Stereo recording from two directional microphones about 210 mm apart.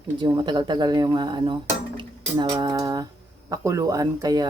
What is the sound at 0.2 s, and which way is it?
Speech, 20° right (ahead or behind).